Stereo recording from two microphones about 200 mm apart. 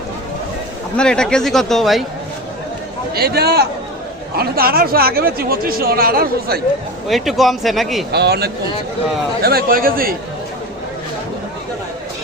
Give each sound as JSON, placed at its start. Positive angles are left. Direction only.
{"t": 0.9, "sound": "a man's voice", "side_deg": 5}
{"t": 3.2, "sound": "speech", "side_deg": -50}
{"t": 7.1, "sound": "a man's voice", "side_deg": 0}
{"t": 8.1, "sound": "speech", "side_deg": -55}